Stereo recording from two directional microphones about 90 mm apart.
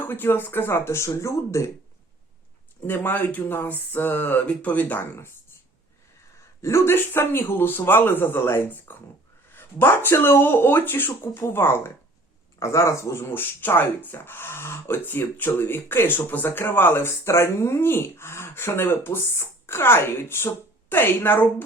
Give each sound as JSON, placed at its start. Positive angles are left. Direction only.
{"t": 0.0, "sound": "speech", "side_deg": 20}
{"t": 2.8, "sound": "speech", "side_deg": 20}
{"t": 6.6, "sound": "speech", "side_deg": 30}